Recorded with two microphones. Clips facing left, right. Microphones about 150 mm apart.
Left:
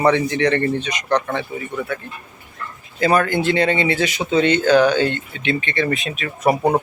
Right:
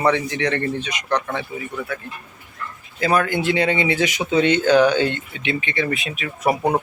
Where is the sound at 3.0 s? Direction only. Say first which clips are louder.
Left 2 dB; 5° right (ahead or behind).